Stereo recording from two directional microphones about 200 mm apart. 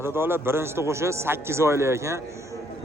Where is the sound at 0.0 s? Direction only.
10° right (ahead or behind).